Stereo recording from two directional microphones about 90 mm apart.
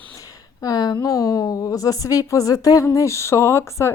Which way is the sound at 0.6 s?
45° left (ahead or behind).